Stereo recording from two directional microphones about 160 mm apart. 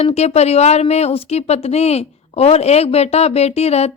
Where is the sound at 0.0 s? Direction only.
40° left (ahead or behind).